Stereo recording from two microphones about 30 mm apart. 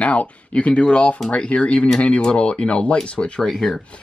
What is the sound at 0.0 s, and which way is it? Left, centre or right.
Speech, left.